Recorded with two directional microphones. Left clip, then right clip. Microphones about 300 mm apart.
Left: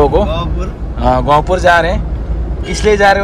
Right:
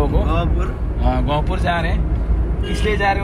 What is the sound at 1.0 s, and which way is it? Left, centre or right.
Speech, left.